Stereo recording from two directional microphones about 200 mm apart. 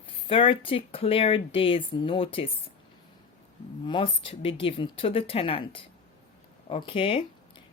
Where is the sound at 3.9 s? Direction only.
25° left (ahead or behind).